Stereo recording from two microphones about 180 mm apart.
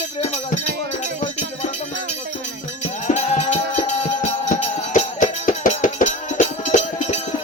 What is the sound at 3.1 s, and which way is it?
Music, 40° left (ahead or behind).